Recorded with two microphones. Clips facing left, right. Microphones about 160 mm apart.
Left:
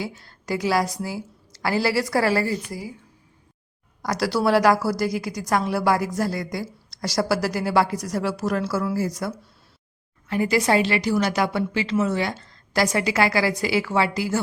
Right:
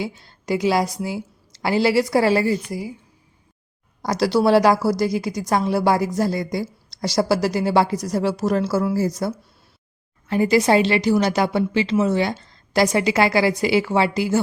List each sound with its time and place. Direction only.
0.0 s a woman's voice: 20° right (ahead or behind)
4.0 s a woman's voice: 25° right (ahead or behind)